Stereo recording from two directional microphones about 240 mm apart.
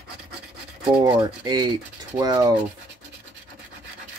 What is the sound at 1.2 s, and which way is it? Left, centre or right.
Speech, centre.